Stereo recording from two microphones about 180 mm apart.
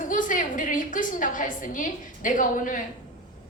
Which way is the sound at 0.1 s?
45° left (ahead or behind).